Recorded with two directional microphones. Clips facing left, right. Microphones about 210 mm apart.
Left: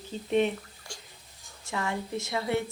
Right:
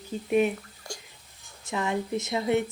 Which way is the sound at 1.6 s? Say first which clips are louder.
Right 4 dB; 20° right (ahead or behind).